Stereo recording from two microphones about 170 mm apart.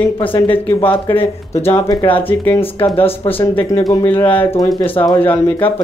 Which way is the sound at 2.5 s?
35° left (ahead or behind).